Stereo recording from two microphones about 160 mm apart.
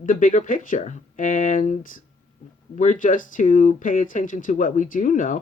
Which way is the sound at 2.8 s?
55° left (ahead or behind).